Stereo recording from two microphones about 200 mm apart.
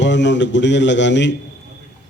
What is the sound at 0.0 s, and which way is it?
Speech, 65° left (ahead or behind).